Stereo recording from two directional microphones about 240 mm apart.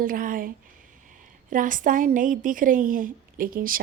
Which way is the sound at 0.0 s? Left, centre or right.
Right.